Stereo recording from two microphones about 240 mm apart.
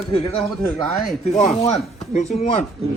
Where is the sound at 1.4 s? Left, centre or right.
Left.